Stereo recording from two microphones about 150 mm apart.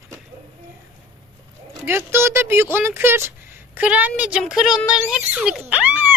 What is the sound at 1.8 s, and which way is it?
Speech, 15° right (ahead or behind).